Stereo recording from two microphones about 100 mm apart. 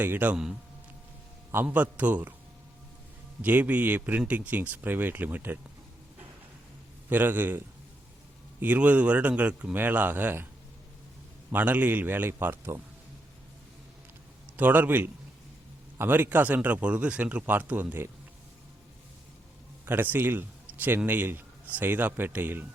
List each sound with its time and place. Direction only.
0.0 s a man's voice: 20° right (ahead or behind)
1.6 s speech: 15° right (ahead or behind)
3.4 s speech: 15° right (ahead or behind)
7.1 s a man's voice: 20° right (ahead or behind)
8.6 s speech: 15° right (ahead or behind)
11.5 s a man's voice: 15° right (ahead or behind)
14.5 s a man's voice: 20° right (ahead or behind)
19.8 s a man's voice: 20° right (ahead or behind)